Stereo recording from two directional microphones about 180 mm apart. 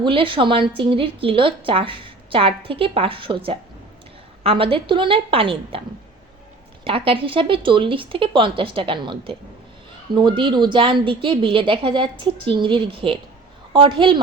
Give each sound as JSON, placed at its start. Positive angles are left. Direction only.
{"t": 0.0, "sound": "a woman's voice", "side_deg": -30}
{"t": 6.8, "sound": "a woman's voice", "side_deg": -30}